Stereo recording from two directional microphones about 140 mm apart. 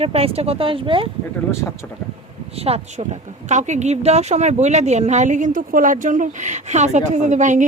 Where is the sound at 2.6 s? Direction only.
45° right (ahead or behind).